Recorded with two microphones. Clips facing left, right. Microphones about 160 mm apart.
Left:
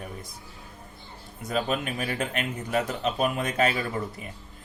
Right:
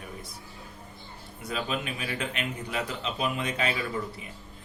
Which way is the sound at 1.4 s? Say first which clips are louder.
Left 4 dB; 45° left (ahead or behind).